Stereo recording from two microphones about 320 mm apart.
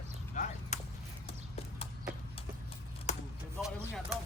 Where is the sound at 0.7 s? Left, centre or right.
Left.